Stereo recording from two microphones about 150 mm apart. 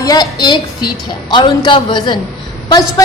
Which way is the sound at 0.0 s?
25° left (ahead or behind).